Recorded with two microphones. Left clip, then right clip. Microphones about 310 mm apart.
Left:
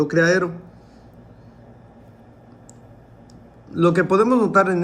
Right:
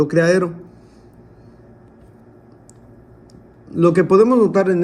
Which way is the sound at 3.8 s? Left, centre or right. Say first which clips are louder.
Right 4 dB; right.